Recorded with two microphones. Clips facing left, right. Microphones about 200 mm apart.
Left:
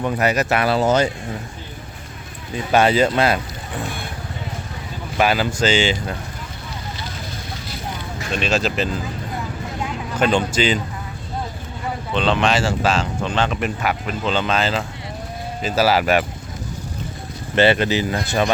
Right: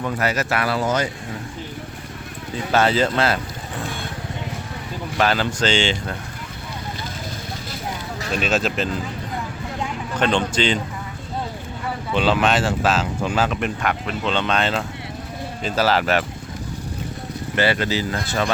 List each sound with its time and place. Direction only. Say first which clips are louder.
0.0 s speech: left 3 dB; 20° left (ahead or behind)
2.7 s speech: left 3 dB; 15° left (ahead or behind)
5.1 s speech: left 2 dB; 10° left (ahead or behind)
8.3 s speech: left 1 dB; centre (ahead or behind)
10.2 s speech: left 2 dB; 5° left (ahead or behind)
12.1 s speech: even; 5° right (ahead or behind); by 16.2 s 10° left (ahead or behind)
17.5 s speech: left 5 dB; 25° left (ahead or behind)